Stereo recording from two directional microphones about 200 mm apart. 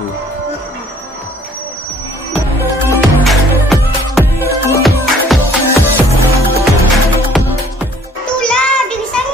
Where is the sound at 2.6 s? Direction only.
10° right (ahead or behind).